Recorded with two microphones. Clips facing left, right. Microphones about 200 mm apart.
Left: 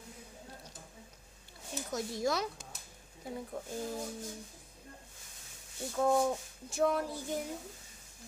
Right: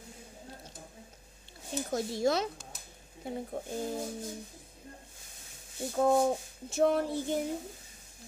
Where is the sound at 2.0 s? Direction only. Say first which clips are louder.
Right 4 dB; 30° right (ahead or behind).